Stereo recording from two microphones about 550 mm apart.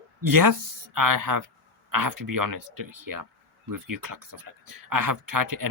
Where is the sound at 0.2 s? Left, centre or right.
Right.